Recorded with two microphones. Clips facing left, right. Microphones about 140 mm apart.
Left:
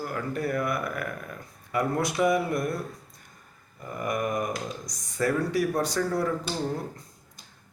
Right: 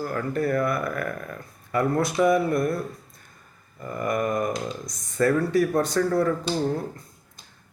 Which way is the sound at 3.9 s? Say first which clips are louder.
Right 3 dB; 15° left (ahead or behind).